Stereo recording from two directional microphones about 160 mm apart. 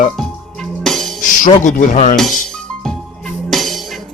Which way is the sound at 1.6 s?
50° left (ahead or behind).